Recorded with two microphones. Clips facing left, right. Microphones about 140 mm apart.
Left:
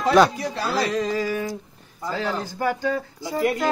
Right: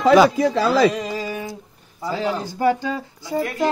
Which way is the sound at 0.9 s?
15° right (ahead or behind).